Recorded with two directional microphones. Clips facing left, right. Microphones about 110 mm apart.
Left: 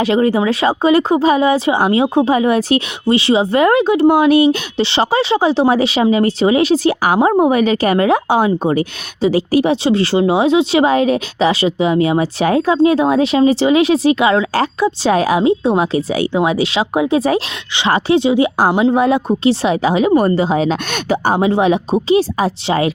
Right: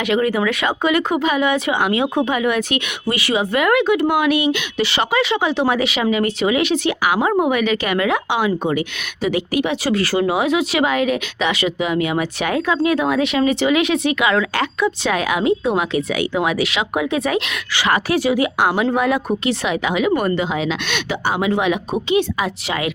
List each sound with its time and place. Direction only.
0.0 s speech: 30° left (ahead or behind)